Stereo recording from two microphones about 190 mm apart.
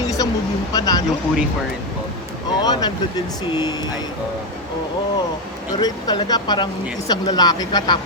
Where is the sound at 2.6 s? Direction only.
20° left (ahead or behind).